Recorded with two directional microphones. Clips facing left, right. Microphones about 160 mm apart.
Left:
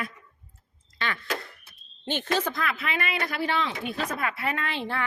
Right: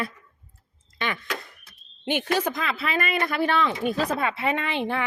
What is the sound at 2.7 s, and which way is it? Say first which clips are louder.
Speech: right 4 dB; 35° right (ahead or behind).